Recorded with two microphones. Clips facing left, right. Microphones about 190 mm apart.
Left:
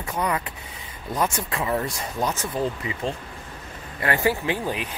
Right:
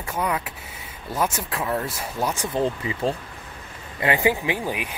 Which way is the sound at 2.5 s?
30° right (ahead or behind).